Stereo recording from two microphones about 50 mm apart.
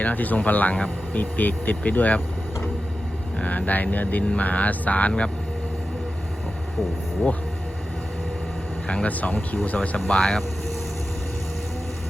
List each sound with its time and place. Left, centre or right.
0.0 s speech: left
3.3 s speech: left
8.9 s speech: left
10.1 s speech: centre